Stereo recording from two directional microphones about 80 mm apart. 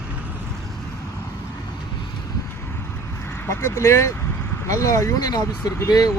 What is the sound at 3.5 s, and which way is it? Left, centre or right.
Speech, left.